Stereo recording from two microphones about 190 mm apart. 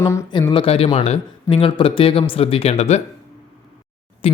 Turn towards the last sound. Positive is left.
turn(degrees=30)  # may be behind; listen again after turning